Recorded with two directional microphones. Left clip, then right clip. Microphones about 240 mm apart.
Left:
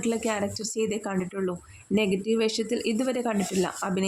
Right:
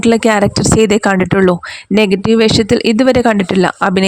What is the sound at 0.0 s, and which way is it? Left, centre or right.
Speech, right.